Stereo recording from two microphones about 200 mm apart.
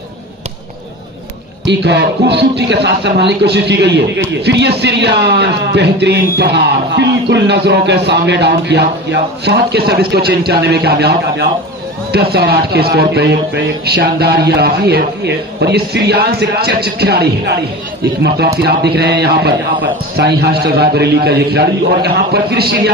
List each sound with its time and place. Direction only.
1.6 s speech: 60° right (ahead or behind)